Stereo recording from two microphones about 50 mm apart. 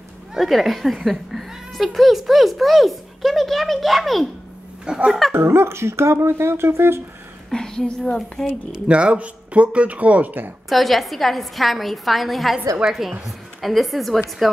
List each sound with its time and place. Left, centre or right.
0.3 s speech: centre
4.8 s speech: centre
5.3 s speech: right
7.5 s speech: centre
8.8 s speech: right
10.7 s speech: centre
12.8 s speech: centre
13.6 s speech: centre